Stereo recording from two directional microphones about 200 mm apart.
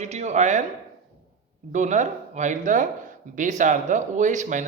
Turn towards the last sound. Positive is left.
turn(degrees=-40)  # may be behind; listen again after turning